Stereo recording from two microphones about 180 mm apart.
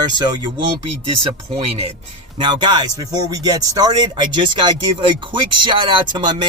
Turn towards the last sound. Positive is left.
turn(degrees=-25)  # may be behind; listen again after turning